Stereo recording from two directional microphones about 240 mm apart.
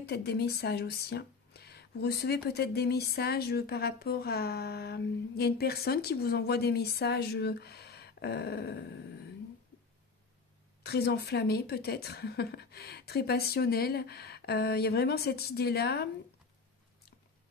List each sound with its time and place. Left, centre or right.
0.0 s speech: left
10.8 s speech: left